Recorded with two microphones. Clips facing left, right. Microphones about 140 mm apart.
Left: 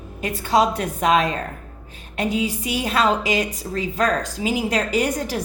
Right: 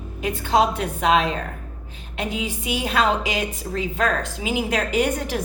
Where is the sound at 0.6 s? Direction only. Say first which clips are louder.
Left 1 dB; 45° left (ahead or behind).